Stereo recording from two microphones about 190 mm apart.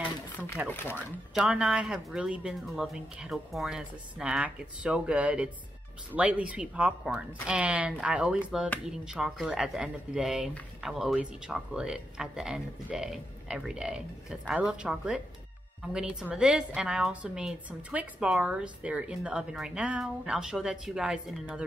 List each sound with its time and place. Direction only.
0.6 s a woman's voice: 10° right (ahead or behind)